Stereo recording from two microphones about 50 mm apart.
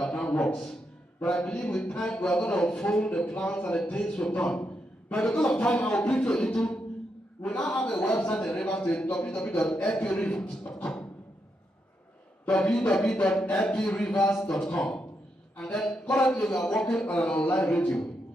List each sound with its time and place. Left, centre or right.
0.0 s a sound: centre
0.3 s a man's voice: left
7.9 s a man's voice: left
10.6 s music: centre
12.4 s a man's voice: centre
13.2 s a man's voice: left